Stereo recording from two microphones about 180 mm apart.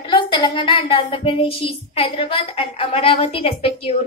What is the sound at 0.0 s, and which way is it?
A woman's voice, 25° left (ahead or behind).